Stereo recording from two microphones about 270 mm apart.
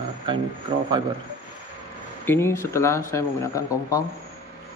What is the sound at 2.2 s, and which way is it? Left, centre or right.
Speech, centre.